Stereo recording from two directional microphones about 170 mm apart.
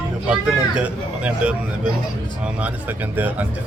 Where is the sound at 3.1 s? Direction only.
10° right (ahead or behind).